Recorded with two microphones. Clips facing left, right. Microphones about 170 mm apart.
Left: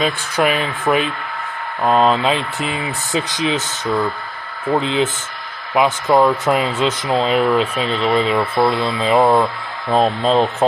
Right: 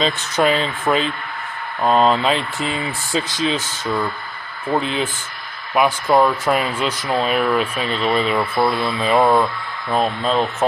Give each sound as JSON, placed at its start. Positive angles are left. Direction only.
{"t": 0.0, "sound": "speech", "side_deg": 15}
{"t": 4.8, "sound": "speech", "side_deg": 20}
{"t": 9.9, "sound": "speech", "side_deg": 35}